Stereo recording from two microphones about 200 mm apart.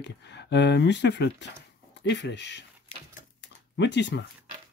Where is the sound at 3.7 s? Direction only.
60° left (ahead or behind).